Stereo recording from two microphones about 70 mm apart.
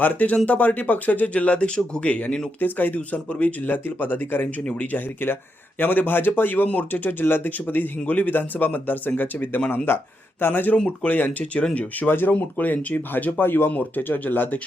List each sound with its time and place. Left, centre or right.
0.0 s speech: left